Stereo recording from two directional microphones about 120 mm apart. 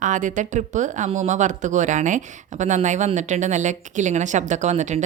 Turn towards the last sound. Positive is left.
turn(degrees=-75)  # may be behind; listen again after turning